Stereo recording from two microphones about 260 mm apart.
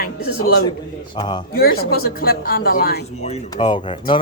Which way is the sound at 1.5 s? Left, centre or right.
Left.